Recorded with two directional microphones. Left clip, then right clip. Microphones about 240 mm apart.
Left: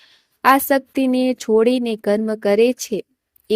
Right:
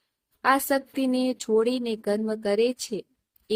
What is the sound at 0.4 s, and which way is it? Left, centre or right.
A woman's voice, left.